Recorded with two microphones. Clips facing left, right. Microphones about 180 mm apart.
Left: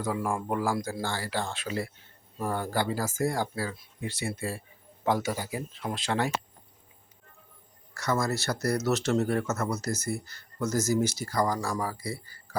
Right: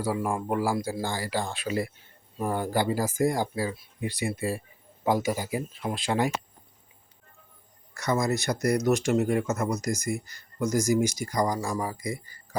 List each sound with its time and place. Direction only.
0.0 s speech: 10° right (ahead or behind)
7.9 s speech: 15° right (ahead or behind)